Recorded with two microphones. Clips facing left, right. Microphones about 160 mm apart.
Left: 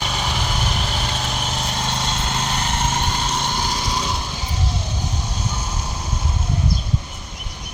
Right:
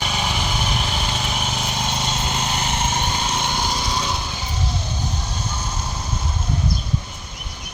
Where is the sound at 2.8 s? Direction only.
Centre (ahead or behind).